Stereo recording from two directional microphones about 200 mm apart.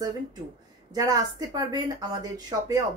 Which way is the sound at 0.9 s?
20° right (ahead or behind).